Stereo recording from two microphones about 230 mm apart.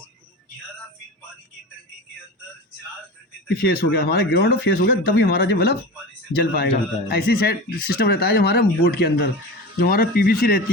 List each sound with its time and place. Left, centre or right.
3.5 s speech: left